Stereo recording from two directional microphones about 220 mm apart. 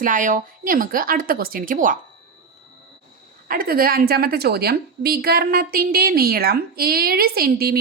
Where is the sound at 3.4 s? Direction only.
40° right (ahead or behind).